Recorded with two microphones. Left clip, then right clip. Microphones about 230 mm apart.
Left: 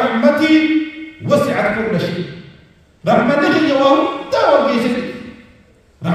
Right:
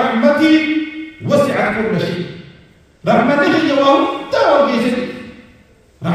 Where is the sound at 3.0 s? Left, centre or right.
Left.